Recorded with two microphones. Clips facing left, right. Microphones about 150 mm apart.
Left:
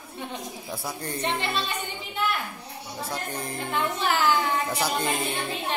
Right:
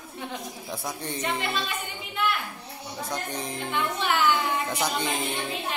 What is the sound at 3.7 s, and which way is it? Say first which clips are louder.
Speech: left 1 dB; 35° left (ahead or behind).